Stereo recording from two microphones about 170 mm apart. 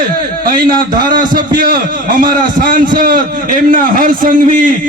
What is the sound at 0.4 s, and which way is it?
A man's voice, 60° right (ahead or behind).